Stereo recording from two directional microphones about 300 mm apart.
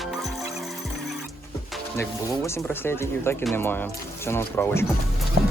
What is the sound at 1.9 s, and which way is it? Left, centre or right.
Speech, centre.